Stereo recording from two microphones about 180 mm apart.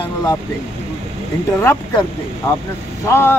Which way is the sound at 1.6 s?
15° left (ahead or behind).